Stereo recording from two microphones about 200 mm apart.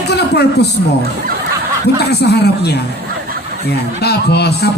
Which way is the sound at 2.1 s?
55° left (ahead or behind).